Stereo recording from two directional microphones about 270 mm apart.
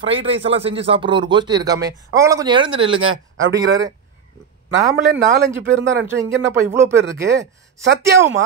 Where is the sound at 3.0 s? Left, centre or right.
Right.